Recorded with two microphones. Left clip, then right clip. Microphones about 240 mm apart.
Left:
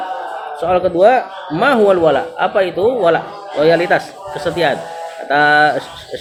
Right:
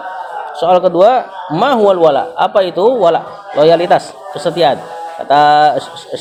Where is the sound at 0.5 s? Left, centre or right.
Right.